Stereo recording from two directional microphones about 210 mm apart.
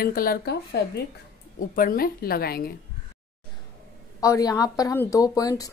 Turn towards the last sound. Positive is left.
turn(degrees=15)  # may be behind; listen again after turning